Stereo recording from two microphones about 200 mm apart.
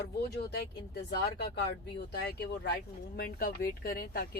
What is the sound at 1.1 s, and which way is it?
Speech, 55° left (ahead or behind).